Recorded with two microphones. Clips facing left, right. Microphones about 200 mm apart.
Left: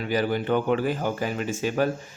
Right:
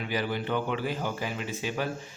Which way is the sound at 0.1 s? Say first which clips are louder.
Left 7 dB; 45° left (ahead or behind).